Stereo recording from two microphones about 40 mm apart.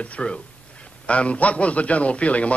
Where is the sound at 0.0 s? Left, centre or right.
Left.